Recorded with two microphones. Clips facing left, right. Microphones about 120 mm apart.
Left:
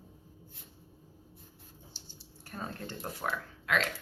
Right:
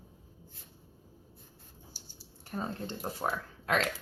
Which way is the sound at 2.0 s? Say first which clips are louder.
Even; 10° right (ahead or behind).